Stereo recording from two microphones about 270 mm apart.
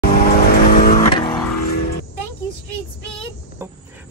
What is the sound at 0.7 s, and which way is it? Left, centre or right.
Vehicle, left.